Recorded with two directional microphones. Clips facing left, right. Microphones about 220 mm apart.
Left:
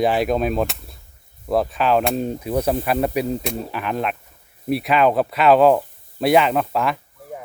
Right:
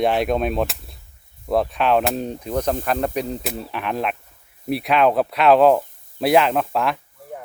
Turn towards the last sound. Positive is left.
turn(degrees=0)  # may be behind; listen again after turning